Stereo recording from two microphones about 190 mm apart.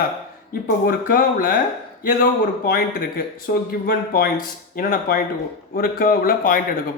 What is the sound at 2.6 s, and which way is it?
A man's voice, 50° left (ahead or behind).